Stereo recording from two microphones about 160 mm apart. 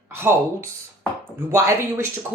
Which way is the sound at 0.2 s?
15° right (ahead or behind).